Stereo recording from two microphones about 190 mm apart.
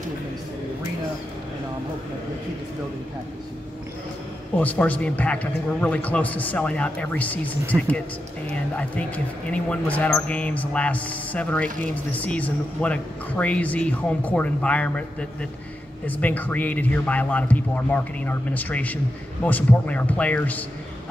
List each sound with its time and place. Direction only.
4.6 s speech: 10° left (ahead or behind)
16.1 s speech: 10° left (ahead or behind)